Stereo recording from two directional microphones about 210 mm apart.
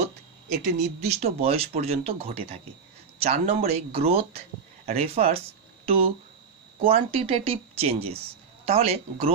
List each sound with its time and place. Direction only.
0.5 s speech: 35° right (ahead or behind)